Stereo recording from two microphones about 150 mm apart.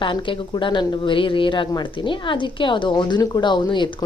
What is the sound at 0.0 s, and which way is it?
A woman's voice, 35° left (ahead or behind).